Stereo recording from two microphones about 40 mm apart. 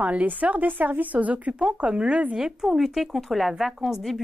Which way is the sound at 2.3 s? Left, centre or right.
Centre.